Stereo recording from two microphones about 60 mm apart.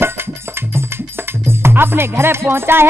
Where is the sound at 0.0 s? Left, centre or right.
Right.